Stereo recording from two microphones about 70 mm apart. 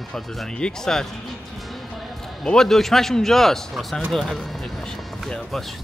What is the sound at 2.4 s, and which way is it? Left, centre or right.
Speech, centre.